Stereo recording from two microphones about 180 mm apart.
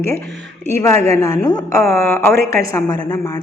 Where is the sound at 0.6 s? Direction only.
15° left (ahead or behind).